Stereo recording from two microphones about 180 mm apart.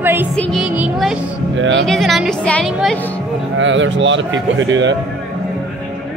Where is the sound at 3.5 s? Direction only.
90° right.